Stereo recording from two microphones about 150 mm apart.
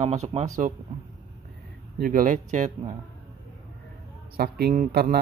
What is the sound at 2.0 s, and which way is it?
Speech, 65° right (ahead or behind).